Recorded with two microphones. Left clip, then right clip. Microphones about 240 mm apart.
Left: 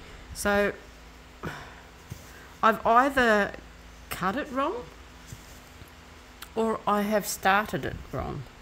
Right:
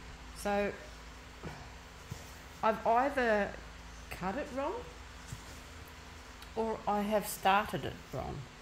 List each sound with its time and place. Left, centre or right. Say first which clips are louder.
0.4 s speech: left 8 dB; left
2.6 s speech: left 8 dB; left
6.5 s speech: left 8 dB; left